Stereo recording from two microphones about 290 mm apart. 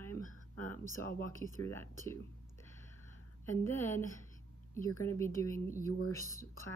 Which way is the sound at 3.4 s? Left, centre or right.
Centre.